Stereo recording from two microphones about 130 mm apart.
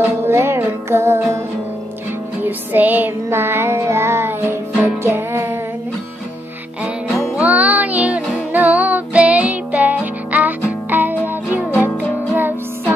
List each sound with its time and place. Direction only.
0.3 s music: 20° right (ahead or behind)
2.4 s music: 15° right (ahead or behind)
7.3 s music: 10° right (ahead or behind)